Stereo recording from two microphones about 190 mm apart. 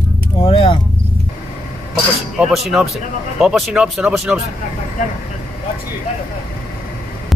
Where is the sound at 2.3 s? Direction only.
Centre (ahead or behind).